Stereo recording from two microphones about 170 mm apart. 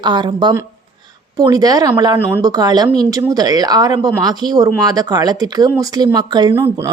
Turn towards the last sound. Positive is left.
turn(degrees=-20)  # may be behind; listen again after turning